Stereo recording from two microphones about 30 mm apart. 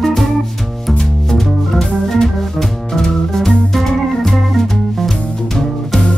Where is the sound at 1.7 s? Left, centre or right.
Centre.